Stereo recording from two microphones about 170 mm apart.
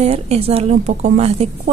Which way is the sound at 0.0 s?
40° right (ahead or behind).